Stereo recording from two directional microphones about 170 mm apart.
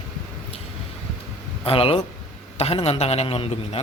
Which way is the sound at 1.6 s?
35° left (ahead or behind).